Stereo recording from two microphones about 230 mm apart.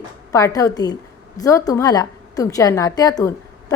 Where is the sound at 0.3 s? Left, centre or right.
Centre.